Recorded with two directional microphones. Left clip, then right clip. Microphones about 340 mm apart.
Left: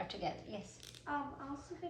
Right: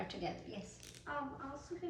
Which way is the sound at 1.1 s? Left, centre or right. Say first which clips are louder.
Left 2 dB; left.